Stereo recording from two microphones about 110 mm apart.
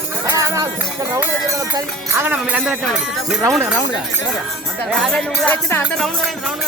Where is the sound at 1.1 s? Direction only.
30° right (ahead or behind).